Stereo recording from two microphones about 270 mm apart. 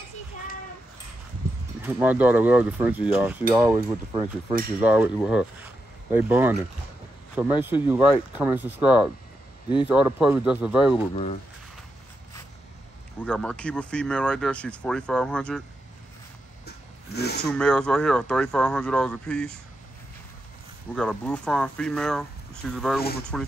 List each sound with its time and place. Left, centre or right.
1.8 s speech: centre
13.2 s speech: centre
16.6 s a sound: left
17.5 s speech: centre
20.9 s speech: centre